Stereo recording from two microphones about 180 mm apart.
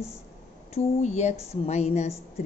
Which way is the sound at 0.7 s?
40° left (ahead or behind).